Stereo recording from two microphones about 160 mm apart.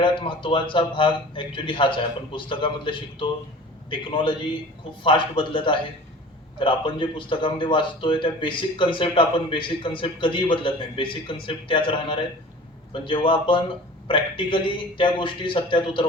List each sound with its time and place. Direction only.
0.0 s a man's voice: 30° left (ahead or behind)